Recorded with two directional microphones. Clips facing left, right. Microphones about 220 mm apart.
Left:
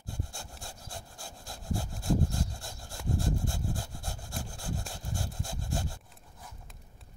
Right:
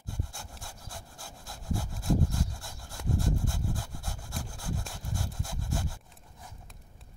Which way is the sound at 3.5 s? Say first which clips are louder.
Even; 30° left (ahead or behind).